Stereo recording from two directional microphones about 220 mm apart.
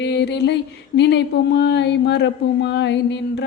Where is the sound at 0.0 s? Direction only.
50° left (ahead or behind).